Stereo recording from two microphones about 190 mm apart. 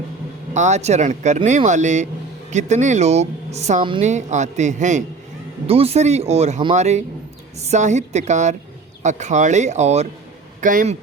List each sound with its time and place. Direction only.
0.5 s a man's voice: 40° right (ahead or behind)